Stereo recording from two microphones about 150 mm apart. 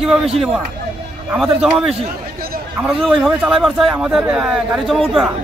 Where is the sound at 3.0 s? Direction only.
Centre (ahead or behind).